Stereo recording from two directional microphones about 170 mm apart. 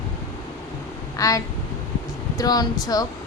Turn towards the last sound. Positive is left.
turn(degrees=20)  # may be behind; listen again after turning